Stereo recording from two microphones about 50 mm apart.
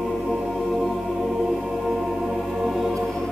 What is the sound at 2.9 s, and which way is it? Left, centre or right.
Music, centre.